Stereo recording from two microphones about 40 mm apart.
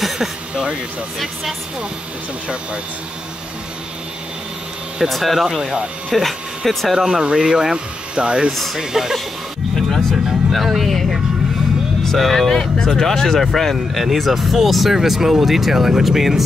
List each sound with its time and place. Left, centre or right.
5.0 s speech: centre
5.6 s speech: right
6.1 s speech: centre
6.9 s speech: centre
8.5 s speech: centre
8.7 s speech: centre
9.8 s music: centre
10.1 s speech: centre